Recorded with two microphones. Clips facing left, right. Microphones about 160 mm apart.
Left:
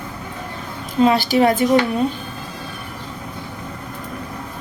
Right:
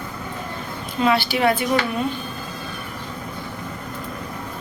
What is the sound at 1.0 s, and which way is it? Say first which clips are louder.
Speech: left 5 dB; 40° left (ahead or behind).